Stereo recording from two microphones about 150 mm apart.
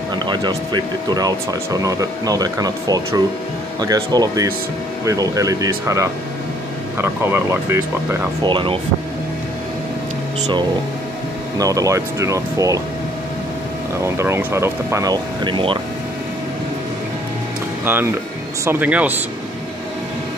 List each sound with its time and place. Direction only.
0.1 s speech: 30° right (ahead or behind)
8.5 s speech: 35° right (ahead or behind)
11.5 s speech: 25° right (ahead or behind)
14.0 s speech: 20° right (ahead or behind); by 15.8 s 35° right (ahead or behind)
17.8 s speech: 15° right (ahead or behind)